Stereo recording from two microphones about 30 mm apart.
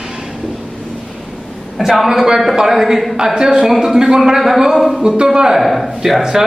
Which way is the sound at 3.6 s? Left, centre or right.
Centre.